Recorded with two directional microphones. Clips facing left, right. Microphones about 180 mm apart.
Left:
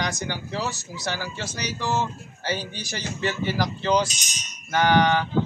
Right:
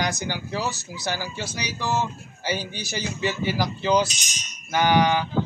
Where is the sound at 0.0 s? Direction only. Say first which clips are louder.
Right 2 dB; 5° right (ahead or behind).